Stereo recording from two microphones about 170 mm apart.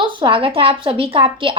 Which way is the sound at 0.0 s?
30° right (ahead or behind).